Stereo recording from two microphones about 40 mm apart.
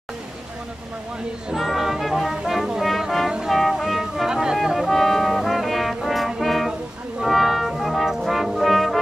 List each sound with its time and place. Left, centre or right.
1.6 s music: centre
2.4 s brass instrument: centre
3.4 s music: centre
4.3 s music: centre
4.8 s brass instrument: centre
6.4 s music: centre
7.2 s brass instrument: centre